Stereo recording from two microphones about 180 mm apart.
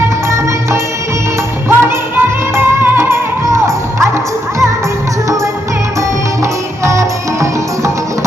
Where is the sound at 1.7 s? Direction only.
10° right (ahead or behind).